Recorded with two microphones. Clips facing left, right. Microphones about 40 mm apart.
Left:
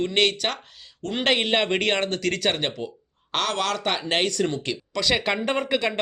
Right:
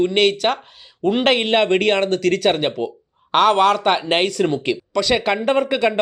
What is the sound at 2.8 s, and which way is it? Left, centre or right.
Speech, right.